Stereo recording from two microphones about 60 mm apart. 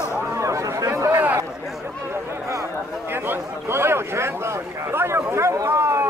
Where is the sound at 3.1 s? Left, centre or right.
Right.